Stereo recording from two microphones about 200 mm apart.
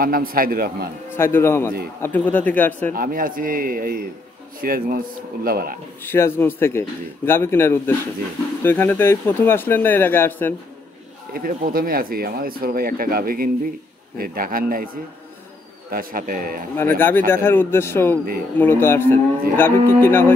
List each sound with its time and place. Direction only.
0.0 s speech: 45° right (ahead or behind)
1.1 s speech: 10° left (ahead or behind)
2.9 s speech: 45° right (ahead or behind)
6.0 s speech: 10° left (ahead or behind)
11.3 s speech: 45° right (ahead or behind)
15.9 s speech: 45° right (ahead or behind)
16.7 s speech: 10° left (ahead or behind)